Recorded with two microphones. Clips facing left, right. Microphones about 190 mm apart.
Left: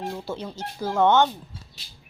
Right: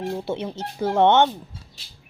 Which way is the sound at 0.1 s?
25° right (ahead or behind).